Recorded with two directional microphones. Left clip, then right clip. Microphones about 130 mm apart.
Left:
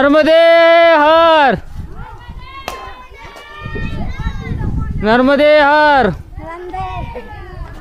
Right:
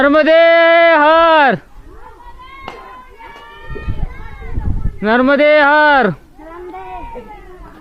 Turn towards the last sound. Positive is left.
turn(degrees=20)  # may be behind; listen again after turning